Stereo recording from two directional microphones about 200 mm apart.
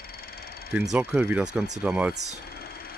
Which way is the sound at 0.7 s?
10° right (ahead or behind).